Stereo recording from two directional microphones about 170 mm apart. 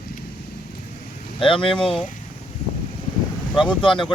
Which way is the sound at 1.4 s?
30° left (ahead or behind).